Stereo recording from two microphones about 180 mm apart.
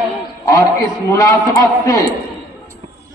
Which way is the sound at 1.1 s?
15° left (ahead or behind).